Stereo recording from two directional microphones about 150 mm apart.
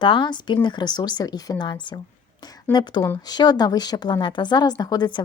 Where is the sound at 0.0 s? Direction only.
30° left (ahead or behind).